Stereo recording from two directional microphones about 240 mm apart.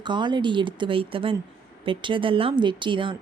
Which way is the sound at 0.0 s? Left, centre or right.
Centre.